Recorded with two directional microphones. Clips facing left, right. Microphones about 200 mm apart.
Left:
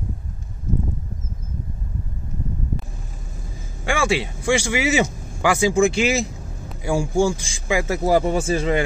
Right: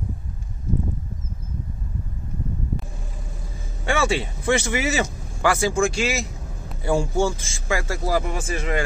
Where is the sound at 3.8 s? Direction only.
10° left (ahead or behind).